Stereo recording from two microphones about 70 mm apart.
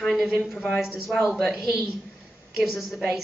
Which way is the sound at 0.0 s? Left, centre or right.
Centre.